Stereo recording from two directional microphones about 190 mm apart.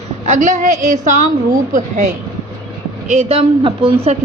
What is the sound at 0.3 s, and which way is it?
A woman's voice, 40° right (ahead or behind).